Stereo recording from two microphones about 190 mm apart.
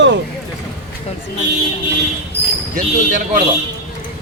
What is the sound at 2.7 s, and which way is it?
Speech, 40° right (ahead or behind).